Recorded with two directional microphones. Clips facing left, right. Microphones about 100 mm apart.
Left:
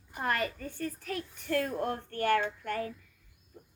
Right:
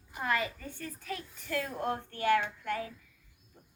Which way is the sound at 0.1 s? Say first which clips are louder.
Left 1 dB; 50° left (ahead or behind).